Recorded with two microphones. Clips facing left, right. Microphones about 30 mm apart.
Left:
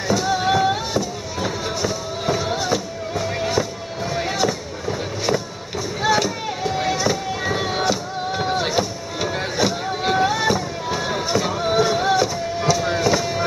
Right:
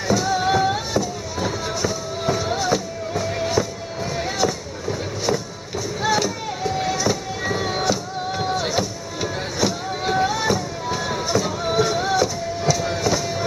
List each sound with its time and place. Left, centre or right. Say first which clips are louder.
0.1 s music: even; centre
6.0 s chop: left 2 dB; centre
8.5 s a sound: left 2 dB; left
8.7 s music: left 2 dB; centre
10.1 s fireworks: left 1 dB; centre